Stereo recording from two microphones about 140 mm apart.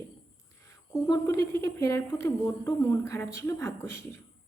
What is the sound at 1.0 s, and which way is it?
A woman's voice, 20° left (ahead or behind).